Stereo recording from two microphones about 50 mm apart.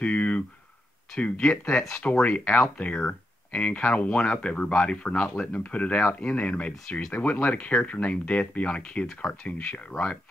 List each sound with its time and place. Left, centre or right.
0.0 s a sound: left
1.2 s speech: left
2.0 s speech: left